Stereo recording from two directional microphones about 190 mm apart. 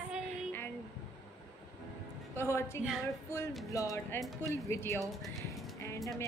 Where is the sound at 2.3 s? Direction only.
15° left (ahead or behind).